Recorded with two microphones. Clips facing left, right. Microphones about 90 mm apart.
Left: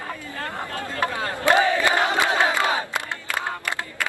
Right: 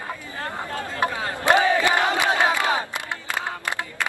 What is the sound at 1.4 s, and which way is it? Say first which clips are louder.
Crowd: even; 20° right (ahead or behind).